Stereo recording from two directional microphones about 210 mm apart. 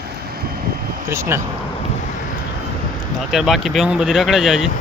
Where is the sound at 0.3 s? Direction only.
45° right (ahead or behind).